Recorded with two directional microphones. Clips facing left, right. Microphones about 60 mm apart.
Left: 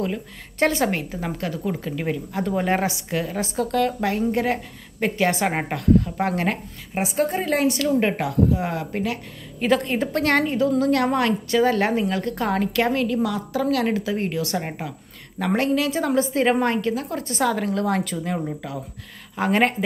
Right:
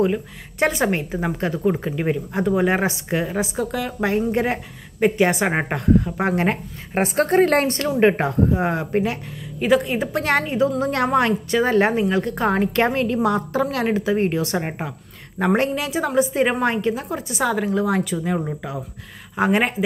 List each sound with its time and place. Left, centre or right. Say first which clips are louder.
0.0 s speech: right 6 dB; centre
2.5 s speech: right 3 dB; centre
2.8 s speech: right 2 dB; right
3.5 s speech: left 3 dB; centre
4.0 s speech: right 2 dB; right
6.9 s a woman's voice: right 4 dB; right
8.0 s speech: right 4 dB; right
9.6 s speech: right 2 dB; centre
10.8 s speech: right 1 dB; right